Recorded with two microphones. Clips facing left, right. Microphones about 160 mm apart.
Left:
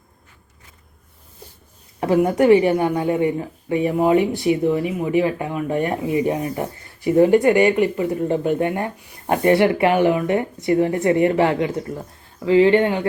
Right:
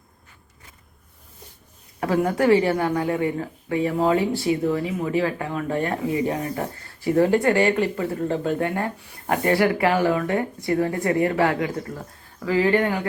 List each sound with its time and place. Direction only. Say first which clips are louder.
2.0 s a woman's voice: left 5 dB; 20° left (ahead or behind)